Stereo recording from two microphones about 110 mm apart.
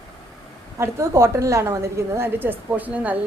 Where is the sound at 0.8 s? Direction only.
25° right (ahead or behind).